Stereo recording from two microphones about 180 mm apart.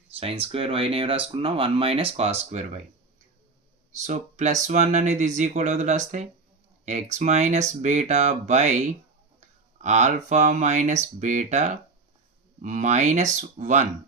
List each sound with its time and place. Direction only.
0.1 s speech: 35° right (ahead or behind)
4.0 s speech: 40° right (ahead or behind)